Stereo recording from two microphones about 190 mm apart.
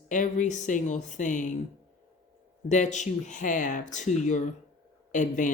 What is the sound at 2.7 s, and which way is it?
Speech, 40° left (ahead or behind).